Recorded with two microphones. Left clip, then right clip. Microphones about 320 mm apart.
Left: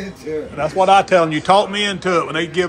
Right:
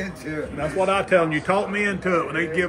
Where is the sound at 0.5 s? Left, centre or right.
Centre.